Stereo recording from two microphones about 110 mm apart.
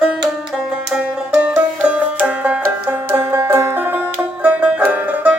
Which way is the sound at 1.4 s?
10° right (ahead or behind).